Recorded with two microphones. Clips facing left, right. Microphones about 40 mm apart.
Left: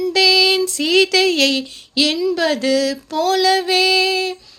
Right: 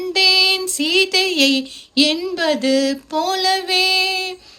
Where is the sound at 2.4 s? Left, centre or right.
Centre.